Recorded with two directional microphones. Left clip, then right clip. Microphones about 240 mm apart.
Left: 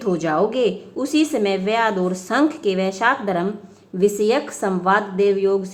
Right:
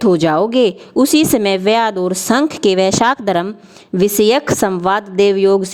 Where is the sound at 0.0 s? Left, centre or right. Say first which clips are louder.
Right 7 dB; right.